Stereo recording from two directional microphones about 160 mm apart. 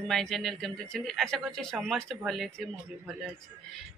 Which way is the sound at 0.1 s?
Centre (ahead or behind).